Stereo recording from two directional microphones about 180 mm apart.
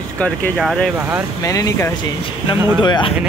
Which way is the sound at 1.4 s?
20° left (ahead or behind).